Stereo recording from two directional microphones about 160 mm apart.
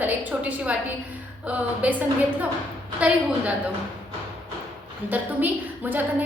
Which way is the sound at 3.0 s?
5° right (ahead or behind).